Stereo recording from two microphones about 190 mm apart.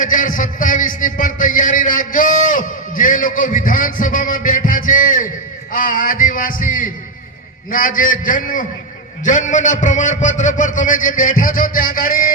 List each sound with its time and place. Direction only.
0.0 s a man's voice: 45° left (ahead or behind)